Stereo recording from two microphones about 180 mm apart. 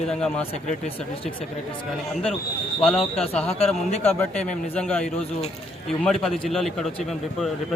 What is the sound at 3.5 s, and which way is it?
Speech, 35° left (ahead or behind).